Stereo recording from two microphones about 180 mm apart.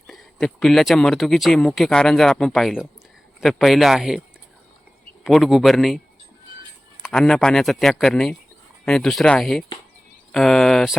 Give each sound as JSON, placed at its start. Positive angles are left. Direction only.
{"t": 0.1, "sound": "speech", "side_deg": 0}
{"t": 5.2, "sound": "speech", "side_deg": 0}
{"t": 7.0, "sound": "speech", "side_deg": 5}